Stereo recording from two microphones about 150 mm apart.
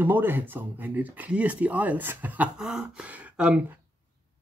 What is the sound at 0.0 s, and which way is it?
Speech, 15° right (ahead or behind).